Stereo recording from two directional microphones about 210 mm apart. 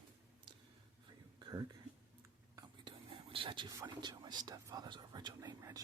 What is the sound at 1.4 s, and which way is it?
Whispering, 20° right (ahead or behind).